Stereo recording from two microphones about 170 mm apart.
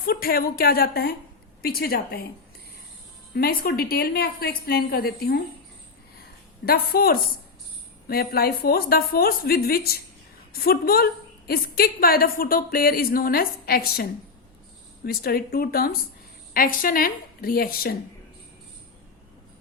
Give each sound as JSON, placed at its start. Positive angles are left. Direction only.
{"t": 0.0, "sound": "a woman's voice", "side_deg": 60}
{"t": 3.3, "sound": "a woman's voice", "side_deg": 60}
{"t": 6.7, "sound": "a woman's voice", "side_deg": 60}